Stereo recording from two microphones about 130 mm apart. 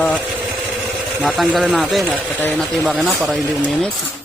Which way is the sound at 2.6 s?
Centre (ahead or behind).